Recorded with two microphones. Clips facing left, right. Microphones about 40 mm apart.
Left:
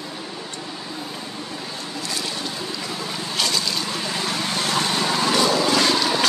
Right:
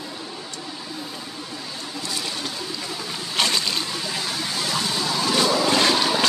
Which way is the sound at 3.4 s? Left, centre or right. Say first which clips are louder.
Right 2 dB; right.